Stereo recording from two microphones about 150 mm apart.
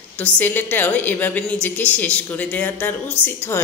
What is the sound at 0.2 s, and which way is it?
A woman's voice, 15° left (ahead or behind).